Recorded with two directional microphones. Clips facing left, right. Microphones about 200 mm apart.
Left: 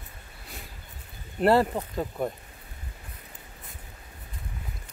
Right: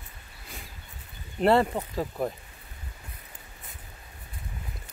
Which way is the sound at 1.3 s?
Centre (ahead or behind).